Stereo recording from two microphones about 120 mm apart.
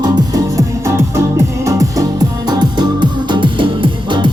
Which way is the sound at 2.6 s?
35° right (ahead or behind).